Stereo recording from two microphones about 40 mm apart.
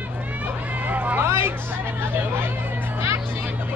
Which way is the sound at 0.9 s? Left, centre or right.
Right.